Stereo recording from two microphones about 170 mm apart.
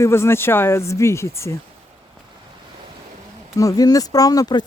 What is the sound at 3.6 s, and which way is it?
Speech, 20° left (ahead or behind).